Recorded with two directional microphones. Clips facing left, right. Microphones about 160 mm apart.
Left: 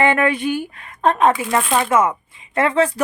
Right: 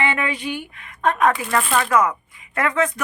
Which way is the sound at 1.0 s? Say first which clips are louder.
Left 3 dB; 30° left (ahead or behind).